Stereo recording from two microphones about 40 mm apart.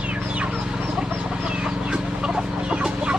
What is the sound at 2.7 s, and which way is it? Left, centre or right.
Chicken, right.